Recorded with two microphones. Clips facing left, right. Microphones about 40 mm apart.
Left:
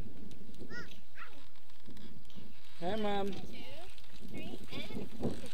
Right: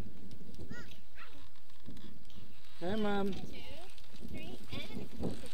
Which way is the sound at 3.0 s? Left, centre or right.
Centre.